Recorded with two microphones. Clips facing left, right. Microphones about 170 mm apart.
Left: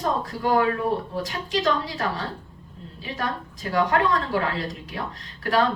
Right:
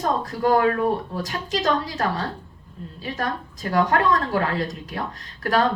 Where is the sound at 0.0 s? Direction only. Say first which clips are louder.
Right 3 dB; 45° right (ahead or behind).